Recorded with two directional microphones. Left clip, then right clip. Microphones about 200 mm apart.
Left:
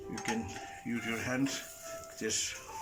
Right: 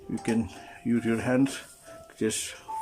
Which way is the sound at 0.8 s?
55° right (ahead or behind).